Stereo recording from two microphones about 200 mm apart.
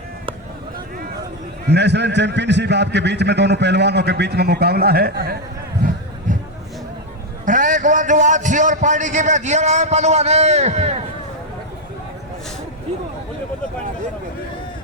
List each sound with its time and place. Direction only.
1.6 s a man's voice: 55° right (ahead or behind)
7.4 s a man's voice: 40° right (ahead or behind)